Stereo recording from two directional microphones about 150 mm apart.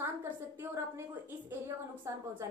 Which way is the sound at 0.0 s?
15° right (ahead or behind).